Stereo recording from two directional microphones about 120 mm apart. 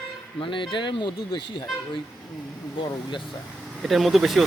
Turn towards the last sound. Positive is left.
turn(degrees=0)  # may be behind; listen again after turning